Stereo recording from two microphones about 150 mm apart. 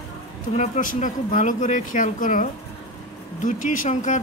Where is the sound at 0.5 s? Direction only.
50° left (ahead or behind).